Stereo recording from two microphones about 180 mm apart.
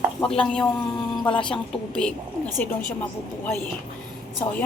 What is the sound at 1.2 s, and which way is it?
Speech, 25° left (ahead or behind).